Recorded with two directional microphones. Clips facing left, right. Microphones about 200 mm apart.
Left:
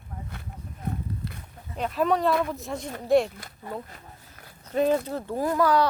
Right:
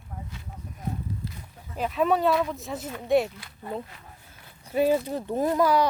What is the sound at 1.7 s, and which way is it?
Speech, centre (ahead or behind).